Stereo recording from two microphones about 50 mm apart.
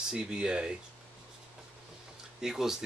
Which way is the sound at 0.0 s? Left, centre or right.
Centre.